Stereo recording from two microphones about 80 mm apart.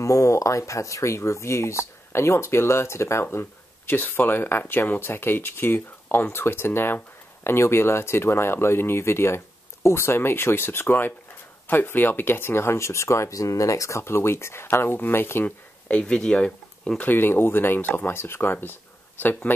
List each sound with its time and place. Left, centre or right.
0.0 s speech: left
15.9 s speech: centre
17.0 s speech: left